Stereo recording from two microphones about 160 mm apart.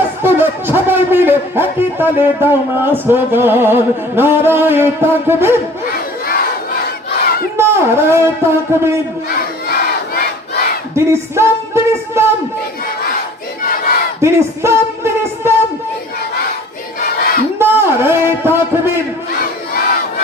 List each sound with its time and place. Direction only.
0.2 s speech: 15° right (ahead or behind)
5.9 s crowd: 65° left (ahead or behind)
7.5 s a man's voice: 15° right (ahead or behind)
9.3 s crowd: 70° left (ahead or behind)
10.9 s music: 15° right (ahead or behind)
14.2 s music: 15° right (ahead or behind)
17.0 s battle cry: 65° left (ahead or behind)
17.6 s a sound: 15° right (ahead or behind)
19.4 s crowd: 65° left (ahead or behind)